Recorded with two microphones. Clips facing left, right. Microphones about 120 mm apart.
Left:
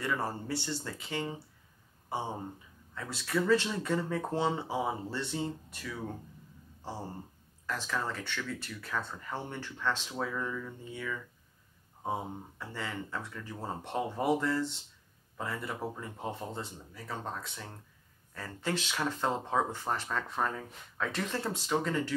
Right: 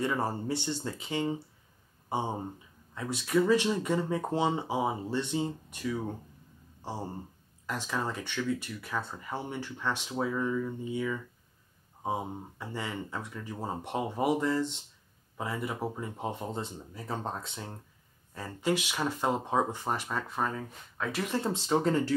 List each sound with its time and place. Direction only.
0.0 s speech: 20° right (ahead or behind)
2.9 s speech: 20° right (ahead or behind)
7.6 s speech: 20° right (ahead or behind)